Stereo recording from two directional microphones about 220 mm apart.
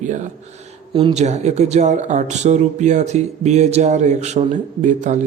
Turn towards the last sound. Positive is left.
turn(degrees=-35)  # may be behind; listen again after turning